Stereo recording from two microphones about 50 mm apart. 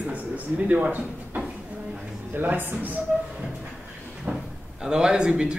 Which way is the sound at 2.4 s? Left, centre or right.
Right.